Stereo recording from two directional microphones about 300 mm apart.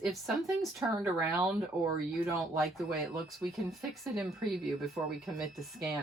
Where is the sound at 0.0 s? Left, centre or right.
Centre.